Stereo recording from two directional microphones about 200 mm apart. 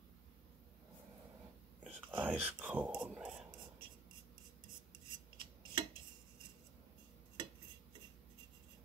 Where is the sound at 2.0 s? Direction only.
10° right (ahead or behind).